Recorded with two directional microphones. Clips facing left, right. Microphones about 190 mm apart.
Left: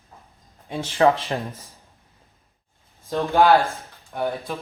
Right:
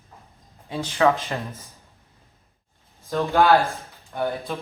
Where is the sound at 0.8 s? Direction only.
30° left (ahead or behind).